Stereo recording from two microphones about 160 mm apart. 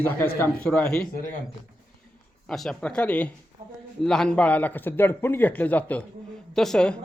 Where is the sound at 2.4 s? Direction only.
5° left (ahead or behind).